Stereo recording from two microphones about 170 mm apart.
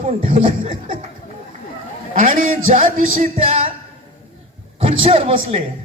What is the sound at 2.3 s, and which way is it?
Music, 55° right (ahead or behind).